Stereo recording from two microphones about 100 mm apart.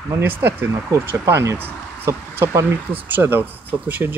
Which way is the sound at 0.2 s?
20° right (ahead or behind).